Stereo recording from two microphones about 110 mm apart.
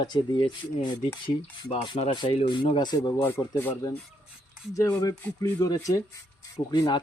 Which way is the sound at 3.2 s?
20° left (ahead or behind).